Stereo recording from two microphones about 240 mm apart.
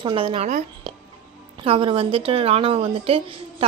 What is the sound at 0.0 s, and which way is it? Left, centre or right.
A woman's voice, right.